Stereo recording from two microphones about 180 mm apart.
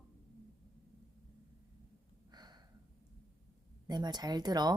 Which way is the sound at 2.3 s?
25° right (ahead or behind).